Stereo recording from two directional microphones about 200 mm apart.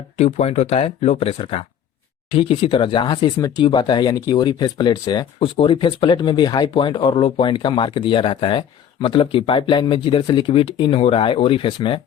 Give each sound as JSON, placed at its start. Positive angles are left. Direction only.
{"t": 0.2, "sound": "speech", "side_deg": 35}